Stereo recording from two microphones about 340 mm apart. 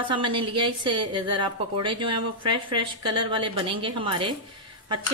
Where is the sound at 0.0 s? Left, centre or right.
Centre.